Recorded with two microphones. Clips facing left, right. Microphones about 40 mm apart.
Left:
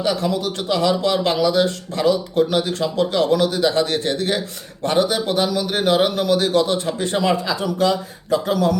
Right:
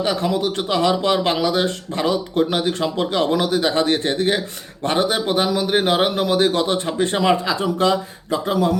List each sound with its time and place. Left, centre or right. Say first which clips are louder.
0.0 s speech: right 1 dB; right
8.3 s speech: left 1 dB; centre